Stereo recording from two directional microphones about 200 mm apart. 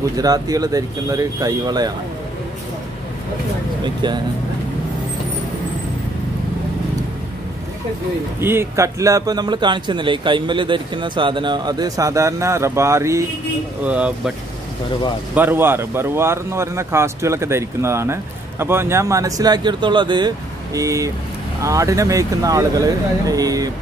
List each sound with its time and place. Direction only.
0.2 s a man's voice: 20° right (ahead or behind)
3.8 s a man's voice: 20° right (ahead or behind)
8.4 s a man's voice: 10° right (ahead or behind)
15.3 s speech: 10° right (ahead or behind)